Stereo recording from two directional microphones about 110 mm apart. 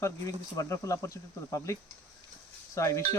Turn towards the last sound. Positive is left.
turn(degrees=25)  # may be behind; listen again after turning